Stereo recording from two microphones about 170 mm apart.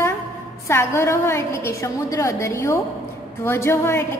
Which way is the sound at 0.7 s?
15° left (ahead or behind).